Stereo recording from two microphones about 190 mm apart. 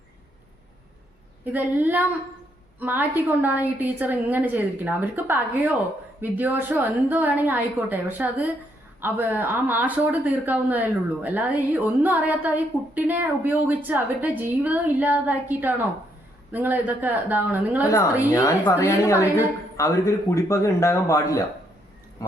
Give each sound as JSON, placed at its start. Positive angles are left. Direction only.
{"t": 1.5, "sound": "speech", "side_deg": -10}
{"t": 18.3, "sound": "a woman's voice", "side_deg": 15}